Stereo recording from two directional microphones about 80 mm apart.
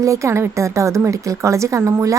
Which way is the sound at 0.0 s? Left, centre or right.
Right.